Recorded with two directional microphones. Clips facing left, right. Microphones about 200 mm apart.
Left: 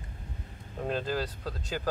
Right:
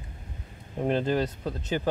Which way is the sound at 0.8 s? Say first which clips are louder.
Right 6 dB; 25° right (ahead or behind).